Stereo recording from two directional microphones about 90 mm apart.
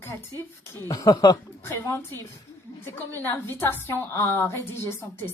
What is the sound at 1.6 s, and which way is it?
Speech, 30° left (ahead or behind).